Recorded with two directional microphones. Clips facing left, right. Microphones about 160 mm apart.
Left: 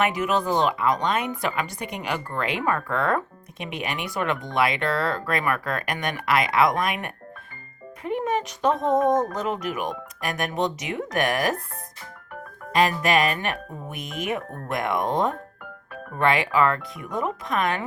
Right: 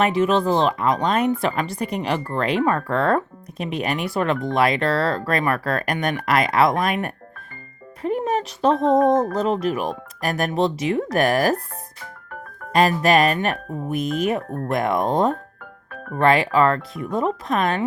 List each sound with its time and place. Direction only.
0.0 s speech: 30° right (ahead or behind)
12.7 s speech: 35° right (ahead or behind)